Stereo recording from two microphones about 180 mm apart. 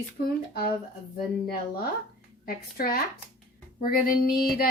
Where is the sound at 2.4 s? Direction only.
55° left (ahead or behind).